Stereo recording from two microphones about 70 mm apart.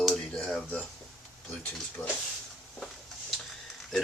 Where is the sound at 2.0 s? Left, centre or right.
Left.